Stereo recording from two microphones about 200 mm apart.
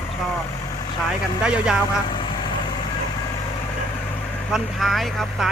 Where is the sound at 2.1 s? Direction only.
25° left (ahead or behind).